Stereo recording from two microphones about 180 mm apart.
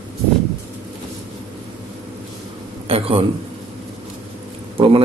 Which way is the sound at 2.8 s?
30° right (ahead or behind).